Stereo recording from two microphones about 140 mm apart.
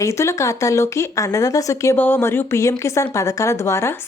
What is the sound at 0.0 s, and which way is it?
Speech, 20° left (ahead or behind).